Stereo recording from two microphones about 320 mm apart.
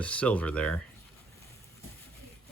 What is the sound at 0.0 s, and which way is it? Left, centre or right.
Speech, centre.